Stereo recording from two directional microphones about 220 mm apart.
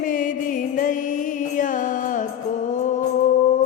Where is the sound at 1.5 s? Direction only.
35° left (ahead or behind).